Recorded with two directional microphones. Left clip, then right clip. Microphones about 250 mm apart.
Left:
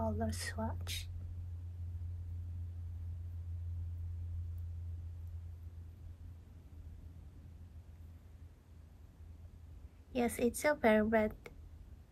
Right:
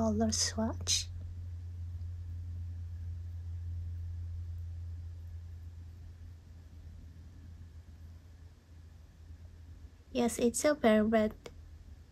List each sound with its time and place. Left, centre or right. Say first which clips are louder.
0.0 s speech: right 7 dB; centre
10.1 s a woman's voice: right 3 dB; centre